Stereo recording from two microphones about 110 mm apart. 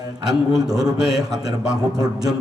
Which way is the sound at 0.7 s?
35° right (ahead or behind).